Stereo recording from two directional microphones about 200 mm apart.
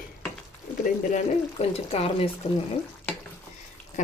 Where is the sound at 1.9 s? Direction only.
30° left (ahead or behind).